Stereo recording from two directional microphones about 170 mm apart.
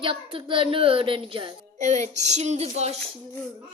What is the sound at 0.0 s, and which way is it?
A child's voice, 30° right (ahead or behind).